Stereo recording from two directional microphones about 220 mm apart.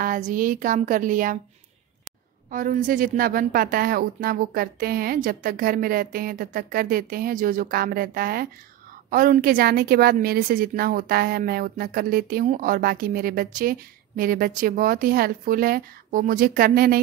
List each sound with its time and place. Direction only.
0.0 s a woman's voice: 40° right (ahead or behind)
2.5 s a woman's voice: 35° right (ahead or behind)